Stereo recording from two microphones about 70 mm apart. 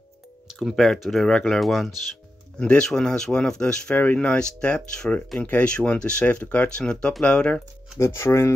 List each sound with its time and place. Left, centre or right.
0.6 s speech: centre
3.9 s speech: left
8.0 s speech: left